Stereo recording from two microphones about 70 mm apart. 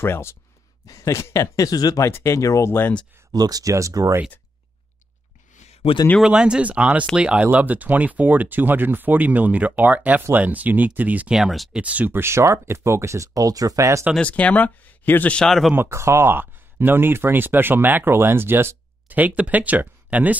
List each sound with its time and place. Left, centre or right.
0.0 s speech: left
0.8 s speech: left
2.0 s speech: left
3.3 s speech: right
6.2 s speech: centre
11.3 s speech: centre
11.7 s speech: centre
12.1 s speech: right
14.2 s speech: left
15.3 s speech: centre
15.7 s speech: right